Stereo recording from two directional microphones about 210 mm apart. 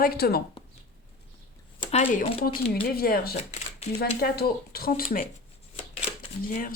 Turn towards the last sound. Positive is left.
turn(degrees=40)  # may be behind; listen again after turning